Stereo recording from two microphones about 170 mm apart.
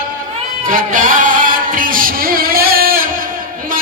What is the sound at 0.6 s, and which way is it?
Music, 50° right (ahead or behind).